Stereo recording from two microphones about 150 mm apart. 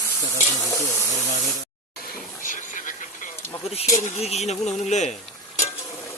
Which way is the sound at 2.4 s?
60° left (ahead or behind).